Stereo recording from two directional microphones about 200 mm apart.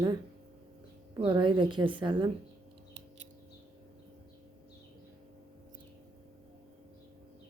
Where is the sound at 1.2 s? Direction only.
25° right (ahead or behind).